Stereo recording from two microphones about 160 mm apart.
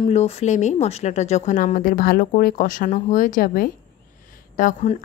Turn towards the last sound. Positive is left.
turn(degrees=55)  # may be behind; listen again after turning